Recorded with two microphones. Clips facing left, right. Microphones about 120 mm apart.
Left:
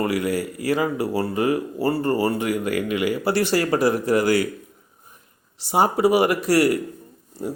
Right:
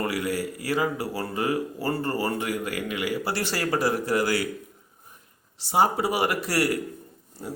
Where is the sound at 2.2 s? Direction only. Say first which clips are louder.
Left 5 dB; 45° left (ahead or behind).